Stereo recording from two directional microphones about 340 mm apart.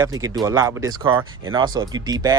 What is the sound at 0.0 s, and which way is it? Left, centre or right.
Speech, centre.